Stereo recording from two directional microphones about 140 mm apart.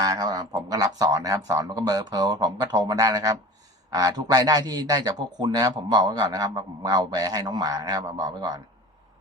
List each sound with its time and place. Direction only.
0.0 s a man's voice: 25° right (ahead or behind)